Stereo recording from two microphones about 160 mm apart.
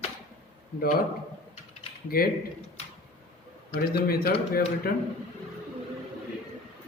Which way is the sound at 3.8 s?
70° left (ahead or behind).